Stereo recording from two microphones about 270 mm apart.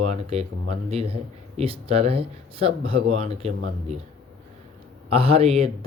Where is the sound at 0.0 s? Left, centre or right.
Right.